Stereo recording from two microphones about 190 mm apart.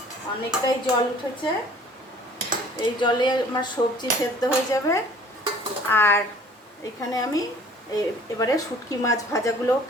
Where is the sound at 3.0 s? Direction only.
25° left (ahead or behind).